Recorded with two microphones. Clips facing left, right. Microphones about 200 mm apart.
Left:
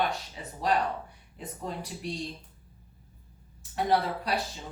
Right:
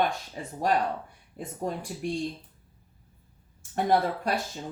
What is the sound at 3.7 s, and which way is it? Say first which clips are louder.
Speech: right 2 dB; 50° right (ahead or behind).